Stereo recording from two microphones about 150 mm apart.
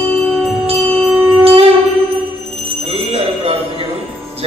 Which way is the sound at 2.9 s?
40° right (ahead or behind).